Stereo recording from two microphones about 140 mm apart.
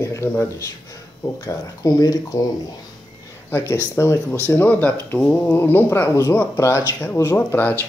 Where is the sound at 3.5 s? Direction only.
15° left (ahead or behind).